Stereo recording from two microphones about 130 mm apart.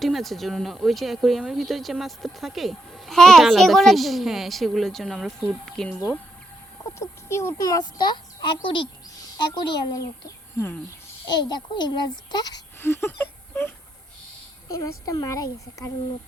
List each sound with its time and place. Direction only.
0.0 s speech: centre (ahead or behind)
7.0 s a child's voice: 20° left (ahead or behind); by 8.9 s 40° left (ahead or behind)
9.6 s speech: 25° left (ahead or behind)
11.3 s a child's voice: 35° left (ahead or behind)
12.8 s whimper: 20° left (ahead or behind)
14.7 s speech: 25° left (ahead or behind)